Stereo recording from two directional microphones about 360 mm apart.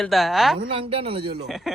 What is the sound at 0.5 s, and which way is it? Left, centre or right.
Speech, centre.